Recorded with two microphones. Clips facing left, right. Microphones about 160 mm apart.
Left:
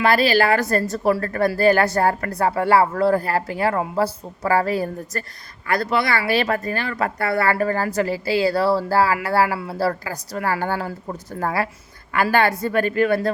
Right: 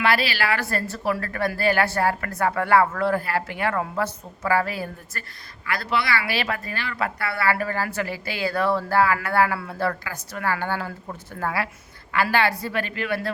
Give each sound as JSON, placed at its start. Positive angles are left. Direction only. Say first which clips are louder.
{"t": 0.0, "sound": "a woman's voice", "louder": "left 6 dB", "side_deg": 45}